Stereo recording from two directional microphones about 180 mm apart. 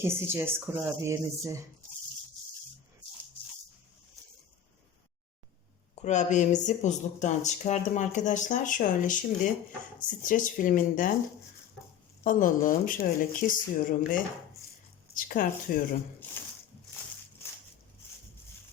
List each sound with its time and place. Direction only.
0.0 s speech: 10° right (ahead or behind)
6.0 s speech: 40° left (ahead or behind)
12.2 s speech: 50° left (ahead or behind)